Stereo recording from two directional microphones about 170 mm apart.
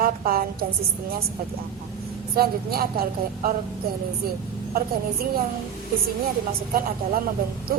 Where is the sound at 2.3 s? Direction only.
65° right (ahead or behind).